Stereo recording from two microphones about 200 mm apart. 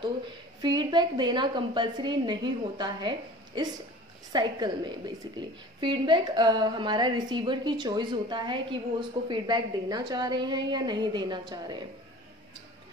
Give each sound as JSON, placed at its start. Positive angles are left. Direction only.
{"t": 0.6, "sound": "a woman's voice", "side_deg": -20}